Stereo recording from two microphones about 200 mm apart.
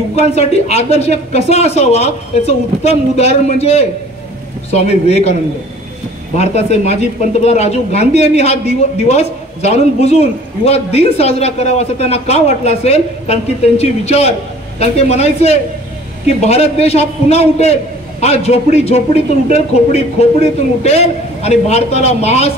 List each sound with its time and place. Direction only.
0.1 s speech: 30° left (ahead or behind)
6.3 s speech: 35° left (ahead or behind)